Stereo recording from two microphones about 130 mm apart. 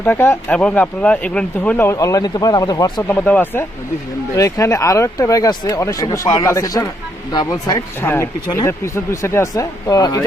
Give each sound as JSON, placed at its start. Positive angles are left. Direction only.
{"t": 0.0, "sound": "speech", "side_deg": 15}
{"t": 1.9, "sound": "speech", "side_deg": 25}
{"t": 3.1, "sound": "speech", "side_deg": 10}
{"t": 8.0, "sound": "speech", "side_deg": 20}